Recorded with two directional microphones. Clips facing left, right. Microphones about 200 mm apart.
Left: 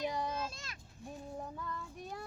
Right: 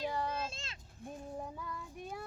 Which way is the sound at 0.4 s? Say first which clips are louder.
Even; 25° right (ahead or behind).